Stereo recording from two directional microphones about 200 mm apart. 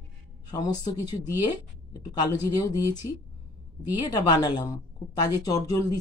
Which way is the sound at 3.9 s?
20° left (ahead or behind).